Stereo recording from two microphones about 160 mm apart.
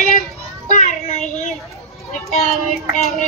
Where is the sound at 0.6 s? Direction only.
50° left (ahead or behind).